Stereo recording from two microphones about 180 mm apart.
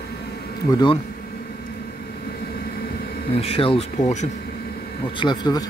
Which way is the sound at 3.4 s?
30° left (ahead or behind).